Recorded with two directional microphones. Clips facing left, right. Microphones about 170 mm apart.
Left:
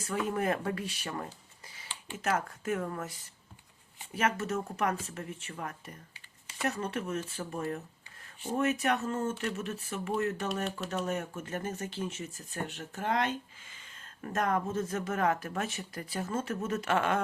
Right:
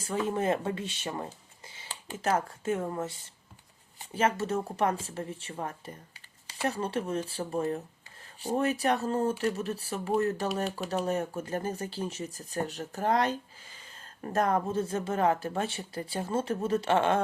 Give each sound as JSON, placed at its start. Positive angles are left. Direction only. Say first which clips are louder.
{"t": 0.0, "sound": "speech", "louder": "right 2 dB", "side_deg": -25}
{"t": 1.9, "sound": "speech", "louder": "right 3 dB", "side_deg": -40}